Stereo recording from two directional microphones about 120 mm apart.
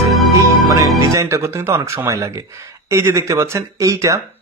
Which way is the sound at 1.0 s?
25° right (ahead or behind).